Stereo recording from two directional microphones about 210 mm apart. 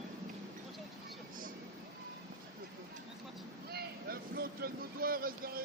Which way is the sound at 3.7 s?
45° right (ahead or behind).